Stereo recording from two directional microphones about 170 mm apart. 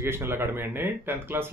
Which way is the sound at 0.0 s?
15° right (ahead or behind).